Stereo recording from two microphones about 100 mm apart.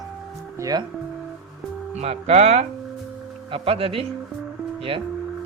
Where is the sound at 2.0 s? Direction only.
90° right.